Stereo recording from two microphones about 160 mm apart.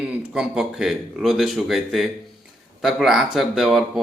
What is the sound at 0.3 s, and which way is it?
Speech, 5° right (ahead or behind).